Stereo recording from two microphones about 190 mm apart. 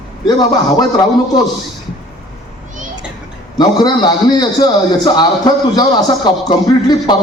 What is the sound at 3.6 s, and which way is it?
A man's voice, 20° left (ahead or behind).